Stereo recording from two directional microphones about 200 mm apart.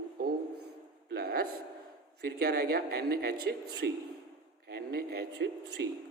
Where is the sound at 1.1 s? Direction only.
50° right (ahead or behind).